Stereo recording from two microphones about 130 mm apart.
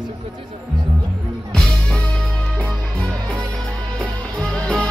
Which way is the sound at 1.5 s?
5° left (ahead or behind).